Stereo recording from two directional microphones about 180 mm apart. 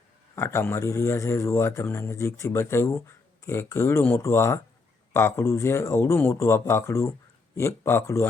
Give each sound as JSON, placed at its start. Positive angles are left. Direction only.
{"t": 0.3, "sound": "speech", "side_deg": 15}